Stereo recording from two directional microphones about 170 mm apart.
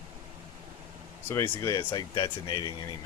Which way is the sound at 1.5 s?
15° left (ahead or behind).